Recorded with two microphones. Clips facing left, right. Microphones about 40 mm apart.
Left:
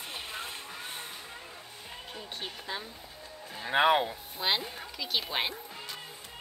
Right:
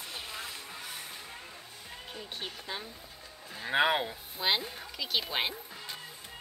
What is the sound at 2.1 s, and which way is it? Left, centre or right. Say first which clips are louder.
Music: even; centre.